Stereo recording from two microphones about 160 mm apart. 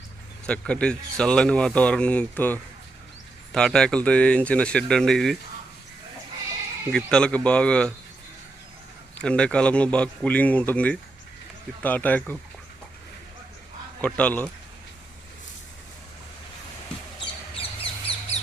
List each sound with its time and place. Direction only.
0.4 s speech: 5° left (ahead or behind)
6.9 s speech: 5° left (ahead or behind)
9.1 s speech: 5° left (ahead or behind)
14.0 s speech: 10° left (ahead or behind)
17.2 s a sound: 35° left (ahead or behind)